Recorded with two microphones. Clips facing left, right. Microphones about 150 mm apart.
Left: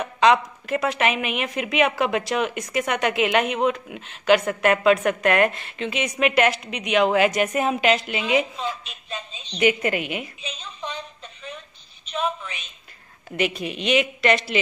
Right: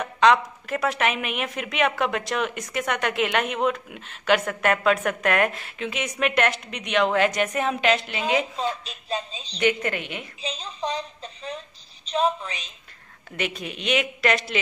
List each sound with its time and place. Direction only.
0.0 s a woman's voice: 5° left (ahead or behind)
8.5 s a woman's voice: 35° right (ahead or behind)
9.6 s a woman's voice: 10° left (ahead or behind)
10.4 s a sound: 35° right (ahead or behind)
12.1 s a woman's voice: 35° right (ahead or behind)
13.4 s a woman's voice: centre (ahead or behind)